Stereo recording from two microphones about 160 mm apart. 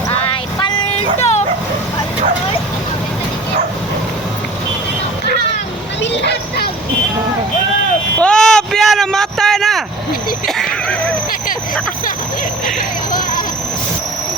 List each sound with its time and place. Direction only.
0.8 s vehicle: 40° left (ahead or behind)
6.0 s vehicle: 90° left
8.2 s vehicle: 5° left (ahead or behind)
10.4 s music: 5° left (ahead or behind)